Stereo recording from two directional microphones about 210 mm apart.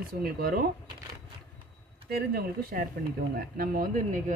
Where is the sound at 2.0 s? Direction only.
45° right (ahead or behind).